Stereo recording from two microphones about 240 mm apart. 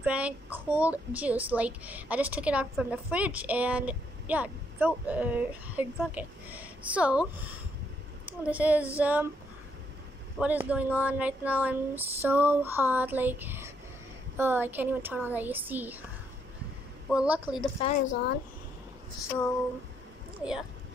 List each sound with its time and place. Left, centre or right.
0.0 s a child's voice: centre
10.4 s a child's voice: centre
17.1 s a woman's voice: centre
18.0 s speech: left
20.3 s speech: centre